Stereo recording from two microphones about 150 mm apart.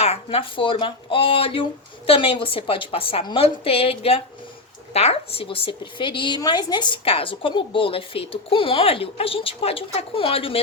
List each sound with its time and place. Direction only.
0.0 s a woman's voice: 45° left (ahead or behind)